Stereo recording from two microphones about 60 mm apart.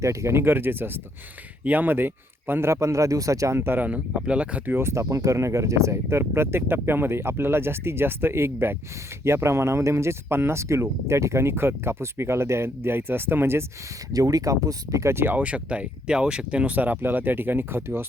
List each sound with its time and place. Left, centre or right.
0.0 s speech: right
2.6 s speech: right
3.6 s speech: right
3.8 s speech: right
4.8 s speech: right
14.1 s speech: right
15.3 s speech: right